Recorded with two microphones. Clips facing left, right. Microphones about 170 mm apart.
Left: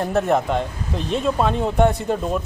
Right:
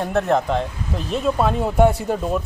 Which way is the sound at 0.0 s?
Centre (ahead or behind).